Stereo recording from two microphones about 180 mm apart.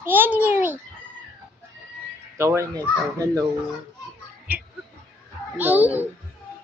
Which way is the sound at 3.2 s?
20° right (ahead or behind).